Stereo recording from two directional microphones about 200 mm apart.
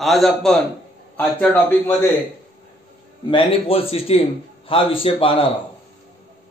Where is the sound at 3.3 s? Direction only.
30° left (ahead or behind).